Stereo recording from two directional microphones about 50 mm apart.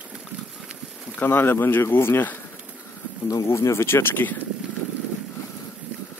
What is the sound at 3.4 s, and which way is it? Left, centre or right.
Speech, left.